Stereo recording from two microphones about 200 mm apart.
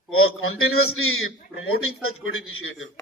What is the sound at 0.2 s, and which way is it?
A man's voice, 90° left.